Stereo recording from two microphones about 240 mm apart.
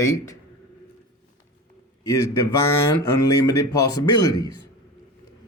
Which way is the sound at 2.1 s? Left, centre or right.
Centre.